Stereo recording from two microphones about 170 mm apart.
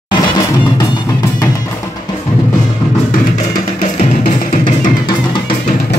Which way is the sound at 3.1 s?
50° left (ahead or behind).